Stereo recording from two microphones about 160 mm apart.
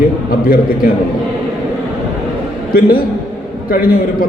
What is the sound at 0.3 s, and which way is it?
Speech, 65° left (ahead or behind).